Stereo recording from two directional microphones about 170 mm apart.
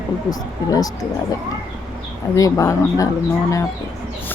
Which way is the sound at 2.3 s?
20° left (ahead or behind).